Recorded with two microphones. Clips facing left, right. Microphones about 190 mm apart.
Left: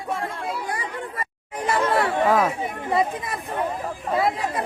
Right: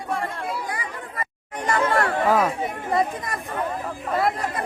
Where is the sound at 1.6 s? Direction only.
5° left (ahead or behind).